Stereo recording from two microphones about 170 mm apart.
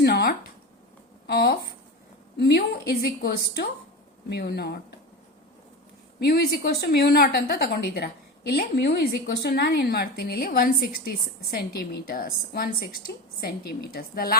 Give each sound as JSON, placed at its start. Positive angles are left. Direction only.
{"t": 0.0, "sound": "a sound", "side_deg": 65}
{"t": 1.3, "sound": "a woman's voice", "side_deg": 65}
{"t": 6.1, "sound": "a woman's voice", "side_deg": 70}